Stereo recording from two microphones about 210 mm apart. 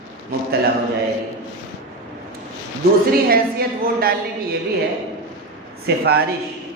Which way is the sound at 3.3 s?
45° right (ahead or behind).